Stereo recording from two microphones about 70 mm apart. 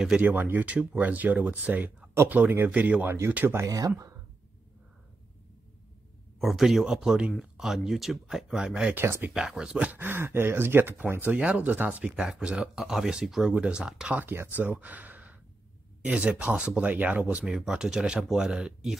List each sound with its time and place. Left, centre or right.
0.2 s speech: right
3.6 s speech: right
6.4 s speech: centre
8.9 s speech: right
9.3 s speech: centre
9.8 s speech: right
11.2 s speech: centre
14.2 s speech: right
17.6 s speech: centre